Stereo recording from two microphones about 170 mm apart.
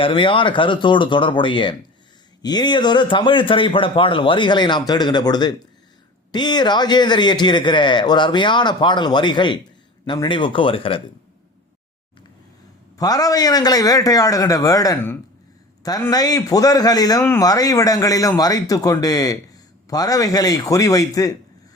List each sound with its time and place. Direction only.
0.0 s a man's voice: 30° left (ahead or behind)
13.0 s a man's voice: 20° left (ahead or behind)